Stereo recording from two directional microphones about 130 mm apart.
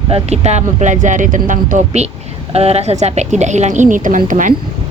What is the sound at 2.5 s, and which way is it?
A woman's voice, 55° right (ahead or behind).